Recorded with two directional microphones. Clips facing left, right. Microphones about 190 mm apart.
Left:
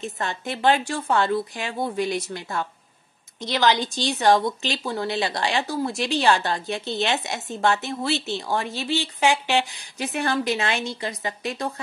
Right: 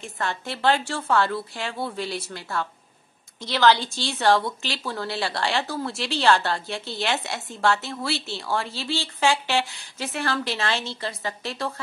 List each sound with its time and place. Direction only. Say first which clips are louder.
0.0 s a woman's voice: left 1 dB; 20° left (ahead or behind)